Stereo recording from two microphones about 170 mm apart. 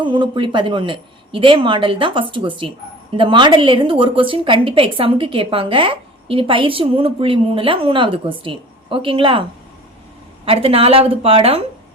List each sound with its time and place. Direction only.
0.0 s speech: 30° right (ahead or behind)
10.4 s speech: 35° right (ahead or behind)